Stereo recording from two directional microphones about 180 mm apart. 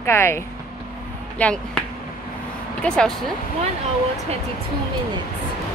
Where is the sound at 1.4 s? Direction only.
10° left (ahead or behind).